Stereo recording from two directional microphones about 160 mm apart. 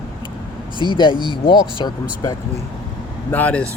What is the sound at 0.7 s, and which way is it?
Speech, 30° left (ahead or behind).